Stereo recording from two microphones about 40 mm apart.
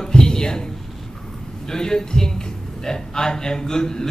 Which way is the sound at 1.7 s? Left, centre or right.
Centre.